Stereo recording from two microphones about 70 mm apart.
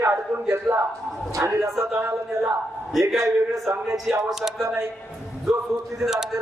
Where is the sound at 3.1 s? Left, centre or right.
Right.